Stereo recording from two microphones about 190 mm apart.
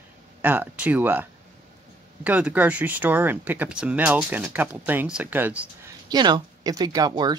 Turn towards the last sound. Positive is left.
turn(degrees=-20)  # may be behind; listen again after turning